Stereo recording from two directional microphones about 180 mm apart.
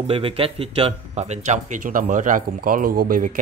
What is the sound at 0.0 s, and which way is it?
Speech, 30° right (ahead or behind).